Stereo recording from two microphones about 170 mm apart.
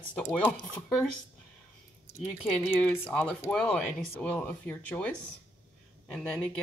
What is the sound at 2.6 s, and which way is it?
A woman's voice, 10° left (ahead or behind).